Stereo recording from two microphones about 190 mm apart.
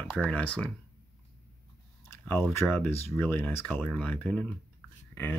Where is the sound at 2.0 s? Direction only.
10° left (ahead or behind).